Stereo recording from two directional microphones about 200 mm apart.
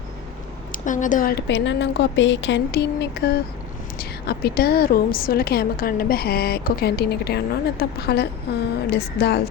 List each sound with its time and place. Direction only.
0.7 s a woman's voice: 40° left (ahead or behind)